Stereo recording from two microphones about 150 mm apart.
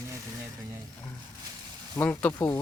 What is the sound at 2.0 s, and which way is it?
Speech, 15° left (ahead or behind).